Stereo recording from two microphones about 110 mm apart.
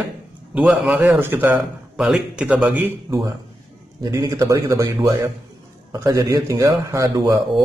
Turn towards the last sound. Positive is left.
turn(degrees=-35)  # may be behind; listen again after turning